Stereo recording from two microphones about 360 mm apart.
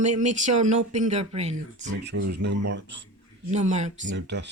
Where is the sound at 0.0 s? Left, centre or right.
Centre.